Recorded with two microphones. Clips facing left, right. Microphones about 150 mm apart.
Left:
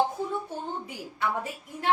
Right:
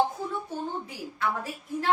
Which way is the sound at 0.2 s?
20° left (ahead or behind).